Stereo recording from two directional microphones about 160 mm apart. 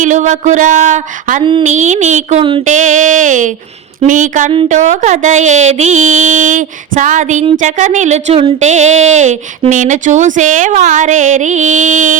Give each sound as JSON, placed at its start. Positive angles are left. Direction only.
{"t": 0.0, "sound": "speech", "side_deg": -50}
{"t": 2.4, "sound": "a sound", "side_deg": -30}
{"t": 2.6, "sound": "speech", "side_deg": -50}